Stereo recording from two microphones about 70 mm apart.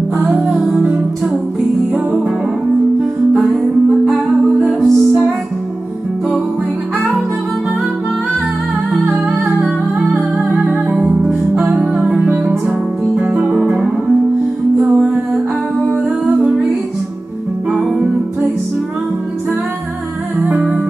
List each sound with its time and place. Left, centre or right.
0.2 s music: centre
4.6 s music: centre
9.4 s music: centre
11.5 s music: right
12.3 s music: right
13.1 s music: centre
17.6 s music: centre
20.5 s music: centre